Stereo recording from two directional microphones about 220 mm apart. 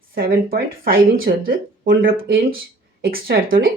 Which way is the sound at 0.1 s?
45° right (ahead or behind).